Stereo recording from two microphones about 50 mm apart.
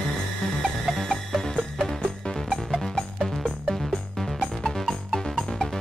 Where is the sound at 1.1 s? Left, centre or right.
Centre.